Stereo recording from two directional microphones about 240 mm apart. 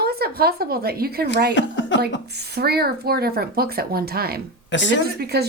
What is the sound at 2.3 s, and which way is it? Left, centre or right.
Speech, right.